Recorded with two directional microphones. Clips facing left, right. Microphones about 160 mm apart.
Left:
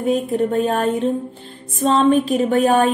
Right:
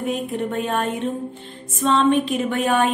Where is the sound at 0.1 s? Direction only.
35° left (ahead or behind).